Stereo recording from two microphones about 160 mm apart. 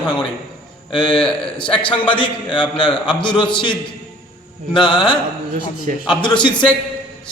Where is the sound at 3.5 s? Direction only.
30° left (ahead or behind).